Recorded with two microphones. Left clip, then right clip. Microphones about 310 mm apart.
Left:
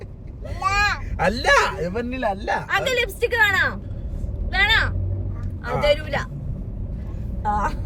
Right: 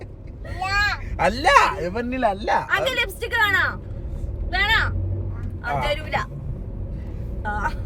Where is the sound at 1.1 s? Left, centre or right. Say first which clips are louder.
Right 3 dB; centre.